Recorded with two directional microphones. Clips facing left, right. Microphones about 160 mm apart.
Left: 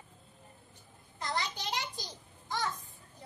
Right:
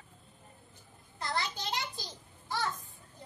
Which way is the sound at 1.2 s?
20° left (ahead or behind).